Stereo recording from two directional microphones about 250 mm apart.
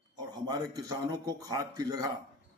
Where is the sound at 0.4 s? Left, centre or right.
Centre.